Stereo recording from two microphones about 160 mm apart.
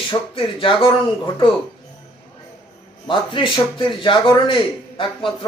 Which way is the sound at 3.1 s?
30° left (ahead or behind).